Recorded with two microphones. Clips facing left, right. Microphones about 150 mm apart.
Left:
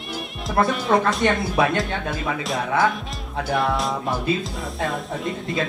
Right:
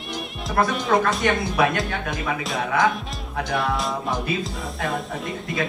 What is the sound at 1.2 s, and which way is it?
Speech, 25° left (ahead or behind).